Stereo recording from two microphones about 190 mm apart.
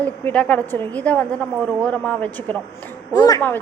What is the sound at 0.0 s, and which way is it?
Speech, 10° left (ahead or behind).